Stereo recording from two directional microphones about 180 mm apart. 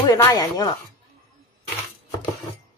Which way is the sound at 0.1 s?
15° left (ahead or behind).